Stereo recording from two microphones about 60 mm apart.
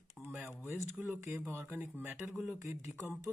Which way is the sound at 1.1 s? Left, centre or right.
Right.